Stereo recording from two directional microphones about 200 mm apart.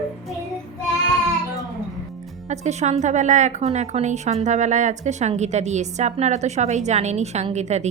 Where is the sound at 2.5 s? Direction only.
35° right (ahead or behind).